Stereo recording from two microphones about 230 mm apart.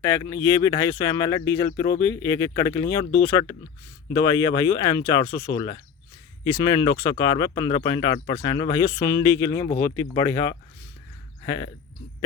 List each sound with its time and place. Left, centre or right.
0.0 s speech: centre